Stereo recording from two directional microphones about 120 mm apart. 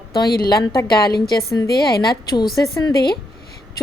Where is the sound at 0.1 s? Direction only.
35° left (ahead or behind).